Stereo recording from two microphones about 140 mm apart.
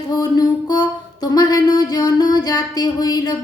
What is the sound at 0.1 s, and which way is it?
Music, 30° left (ahead or behind).